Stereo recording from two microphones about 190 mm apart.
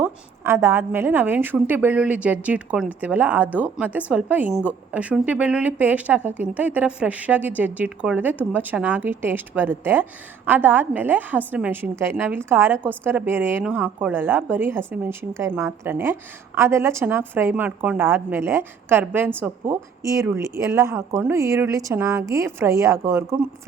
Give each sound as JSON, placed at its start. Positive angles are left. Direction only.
{"t": 0.0, "sound": "a woman's voice", "side_deg": -15}